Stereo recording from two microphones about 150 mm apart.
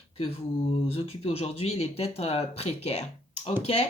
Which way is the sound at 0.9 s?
40° left (ahead or behind).